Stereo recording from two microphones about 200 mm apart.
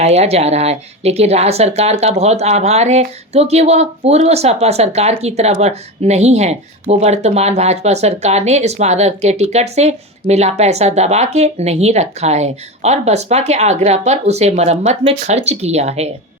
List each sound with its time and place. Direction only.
0.0 s speech: 30° right (ahead or behind)